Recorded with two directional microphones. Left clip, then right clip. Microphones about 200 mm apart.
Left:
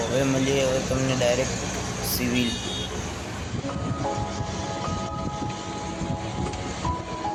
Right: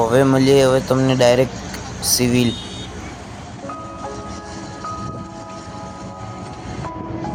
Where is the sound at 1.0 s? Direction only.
30° right (ahead or behind).